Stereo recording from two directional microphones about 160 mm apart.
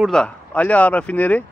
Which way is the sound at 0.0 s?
5° left (ahead or behind).